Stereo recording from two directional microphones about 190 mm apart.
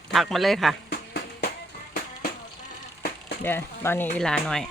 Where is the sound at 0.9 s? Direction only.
60° left (ahead or behind).